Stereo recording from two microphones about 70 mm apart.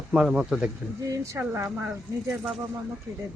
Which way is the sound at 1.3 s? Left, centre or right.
Right.